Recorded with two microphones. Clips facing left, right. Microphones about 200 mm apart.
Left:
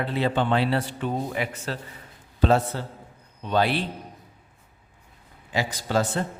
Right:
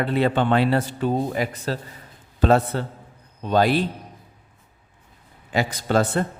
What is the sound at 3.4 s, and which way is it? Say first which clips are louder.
Speech: right 4 dB; 40° right (ahead or behind).